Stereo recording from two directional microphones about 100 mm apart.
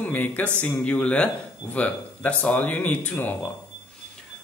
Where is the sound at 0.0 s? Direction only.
15° left (ahead or behind).